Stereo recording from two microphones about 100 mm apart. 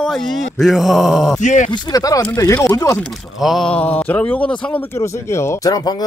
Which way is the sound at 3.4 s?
Centre (ahead or behind).